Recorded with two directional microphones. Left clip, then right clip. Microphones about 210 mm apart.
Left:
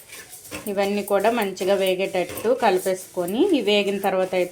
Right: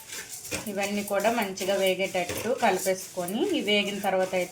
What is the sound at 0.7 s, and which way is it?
Speech, 45° left (ahead or behind).